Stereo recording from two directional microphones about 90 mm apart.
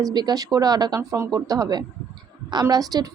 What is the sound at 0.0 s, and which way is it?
A woman's voice, 50° right (ahead or behind).